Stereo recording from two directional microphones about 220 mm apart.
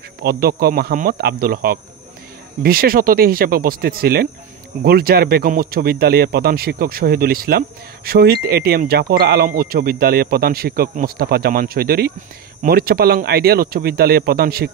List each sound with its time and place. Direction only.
0.2 s speech: 45° right (ahead or behind)